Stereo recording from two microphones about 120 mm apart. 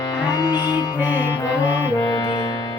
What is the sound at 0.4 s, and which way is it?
Music, 35° left (ahead or behind).